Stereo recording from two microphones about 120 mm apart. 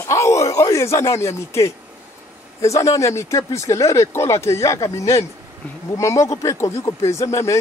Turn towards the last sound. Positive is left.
turn(degrees=25)  # may be behind; listen again after turning